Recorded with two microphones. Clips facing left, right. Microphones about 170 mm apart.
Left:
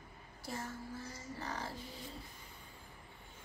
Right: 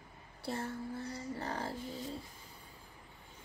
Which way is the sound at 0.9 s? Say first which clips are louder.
Right 6 dB; 65° right (ahead or behind).